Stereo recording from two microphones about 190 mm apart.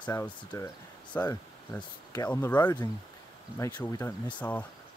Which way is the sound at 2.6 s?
20° left (ahead or behind).